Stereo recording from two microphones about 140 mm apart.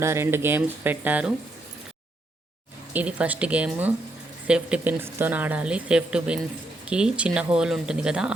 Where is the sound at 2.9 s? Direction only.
10° right (ahead or behind).